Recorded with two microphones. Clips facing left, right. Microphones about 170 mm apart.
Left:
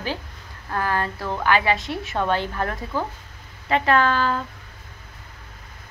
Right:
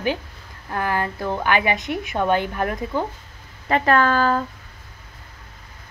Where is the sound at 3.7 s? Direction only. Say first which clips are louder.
Right 2 dB; 45° right (ahead or behind).